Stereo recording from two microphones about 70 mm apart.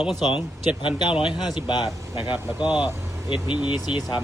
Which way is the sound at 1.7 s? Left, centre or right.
Left.